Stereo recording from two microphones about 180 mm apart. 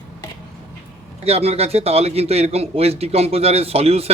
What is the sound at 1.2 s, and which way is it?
A man's voice, 35° right (ahead or behind).